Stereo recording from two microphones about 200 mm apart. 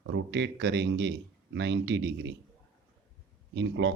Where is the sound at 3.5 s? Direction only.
65° right (ahead or behind).